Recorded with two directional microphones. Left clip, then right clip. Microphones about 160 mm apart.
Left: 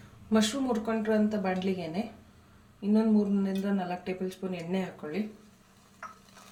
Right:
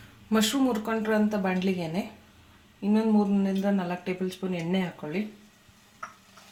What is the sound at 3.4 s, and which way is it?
Speech, 50° right (ahead or behind).